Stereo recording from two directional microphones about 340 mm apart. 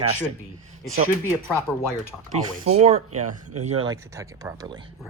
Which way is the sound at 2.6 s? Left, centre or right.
Centre.